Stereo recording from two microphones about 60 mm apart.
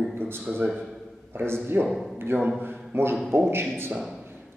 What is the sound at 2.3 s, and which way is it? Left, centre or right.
Speech, right.